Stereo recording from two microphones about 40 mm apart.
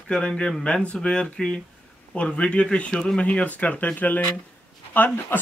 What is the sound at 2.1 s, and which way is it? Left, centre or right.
Speech, left.